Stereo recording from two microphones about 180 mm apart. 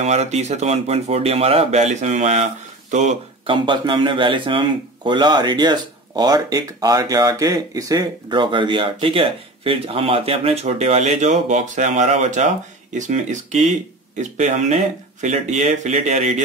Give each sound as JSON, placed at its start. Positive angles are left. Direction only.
{"t": 0.0, "sound": "speech", "side_deg": -40}
{"t": 3.4, "sound": "speech", "side_deg": -25}